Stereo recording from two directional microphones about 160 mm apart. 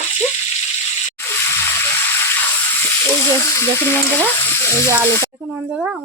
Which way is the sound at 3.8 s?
15° left (ahead or behind).